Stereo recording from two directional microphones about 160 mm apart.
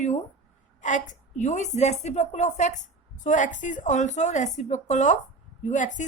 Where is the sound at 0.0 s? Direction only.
45° left (ahead or behind).